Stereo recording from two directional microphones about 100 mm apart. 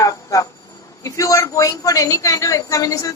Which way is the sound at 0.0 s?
35° left (ahead or behind).